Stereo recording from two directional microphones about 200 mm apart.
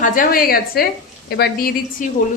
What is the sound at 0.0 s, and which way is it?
A woman's voice, 45° left (ahead or behind).